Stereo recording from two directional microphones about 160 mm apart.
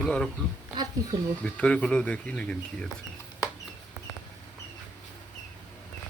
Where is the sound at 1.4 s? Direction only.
10° left (ahead or behind).